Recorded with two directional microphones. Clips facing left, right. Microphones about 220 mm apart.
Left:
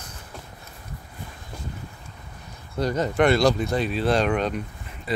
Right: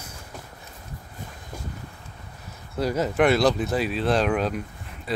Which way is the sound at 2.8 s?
5° right (ahead or behind).